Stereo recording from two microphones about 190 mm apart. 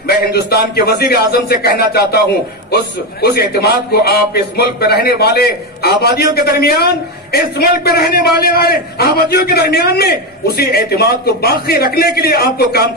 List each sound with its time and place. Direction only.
0.0 s a man's voice: 55° left (ahead or behind)